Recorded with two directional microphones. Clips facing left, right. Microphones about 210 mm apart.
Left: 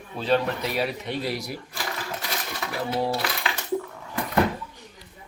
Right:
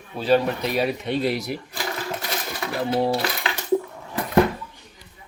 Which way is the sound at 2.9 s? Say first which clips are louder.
Right 4 dB; 25° right (ahead or behind).